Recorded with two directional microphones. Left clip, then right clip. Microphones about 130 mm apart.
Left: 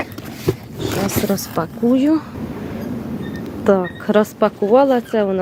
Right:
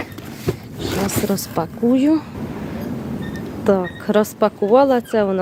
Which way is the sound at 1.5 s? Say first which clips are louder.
Even; 10° right (ahead or behind).